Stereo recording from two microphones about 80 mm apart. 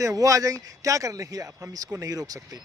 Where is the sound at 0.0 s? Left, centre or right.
Right.